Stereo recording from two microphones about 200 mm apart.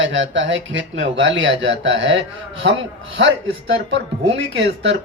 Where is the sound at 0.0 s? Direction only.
70° right (ahead or behind).